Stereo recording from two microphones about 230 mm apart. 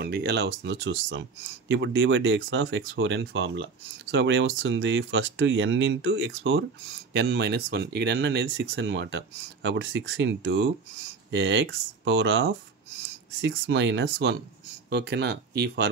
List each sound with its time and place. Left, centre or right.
0.0 s speech: right